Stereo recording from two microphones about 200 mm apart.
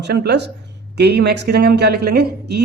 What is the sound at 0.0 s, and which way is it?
Speech, 55° right (ahead or behind).